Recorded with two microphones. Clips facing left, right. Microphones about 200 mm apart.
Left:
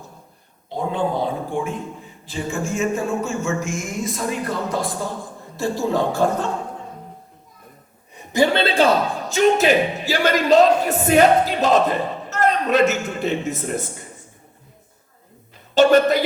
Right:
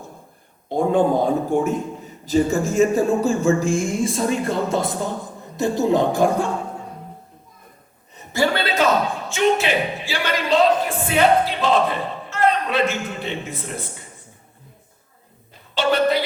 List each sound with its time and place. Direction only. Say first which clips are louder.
0.7 s a man's voice: right 5 dB; 50° right (ahead or behind); by 6.5 s 10° right (ahead or behind)
8.1 s chuckle: left 3 dB; 15° left (ahead or behind)
9.3 s speech: left 4 dB; 40° left (ahead or behind)
15.7 s a woman's voice: left 5 dB; 45° left (ahead or behind)